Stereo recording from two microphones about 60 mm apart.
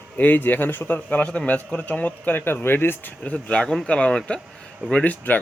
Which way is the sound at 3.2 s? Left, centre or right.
Centre.